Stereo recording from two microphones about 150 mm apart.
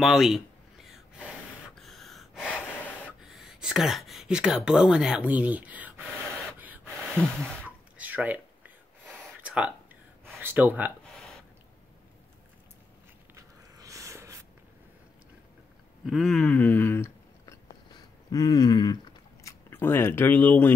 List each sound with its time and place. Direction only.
0.0 s a sound: centre (ahead or behind)
2.4 s gasp: 10° left (ahead or behind)
3.2 s speech: 5° right (ahead or behind)
6.6 s rub: 10° right (ahead or behind)
7.2 s speech: 5° left (ahead or behind)
8.0 s a sound: 10° right (ahead or behind)
10.4 s speech: 15° right (ahead or behind)
13.3 s a sound: 20° right (ahead or behind)
16.1 s speech: centre (ahead or behind)
16.5 s speech: 15° left (ahead or behind)